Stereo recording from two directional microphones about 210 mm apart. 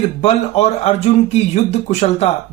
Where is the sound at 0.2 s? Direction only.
30° left (ahead or behind).